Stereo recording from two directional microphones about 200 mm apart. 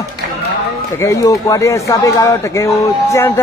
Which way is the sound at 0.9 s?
15° left (ahead or behind).